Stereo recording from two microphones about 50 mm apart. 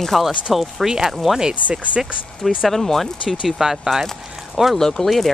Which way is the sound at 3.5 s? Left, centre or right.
Centre.